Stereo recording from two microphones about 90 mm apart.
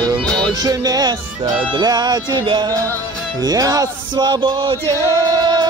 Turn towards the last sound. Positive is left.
turn(degrees=-45)  # may be behind; listen again after turning